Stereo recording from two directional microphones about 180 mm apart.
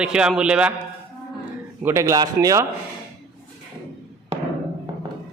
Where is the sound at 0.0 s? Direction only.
5° right (ahead or behind).